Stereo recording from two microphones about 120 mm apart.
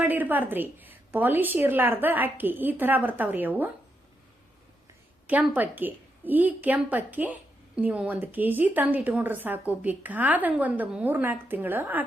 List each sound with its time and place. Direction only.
0.0 s speech: 15° right (ahead or behind)
5.3 s speech: 15° right (ahead or behind)